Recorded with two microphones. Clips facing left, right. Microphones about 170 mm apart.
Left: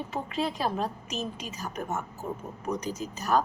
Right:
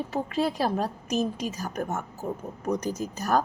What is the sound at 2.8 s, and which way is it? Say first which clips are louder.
Speech: right 4 dB; 45° right (ahead or behind).